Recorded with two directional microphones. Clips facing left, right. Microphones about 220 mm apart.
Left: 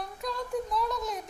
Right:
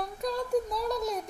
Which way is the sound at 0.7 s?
35° right (ahead or behind).